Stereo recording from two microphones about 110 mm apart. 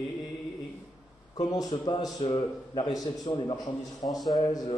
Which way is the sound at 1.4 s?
35° left (ahead or behind).